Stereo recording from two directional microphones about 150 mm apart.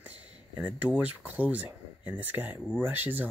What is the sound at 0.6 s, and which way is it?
Speech, 10° right (ahead or behind).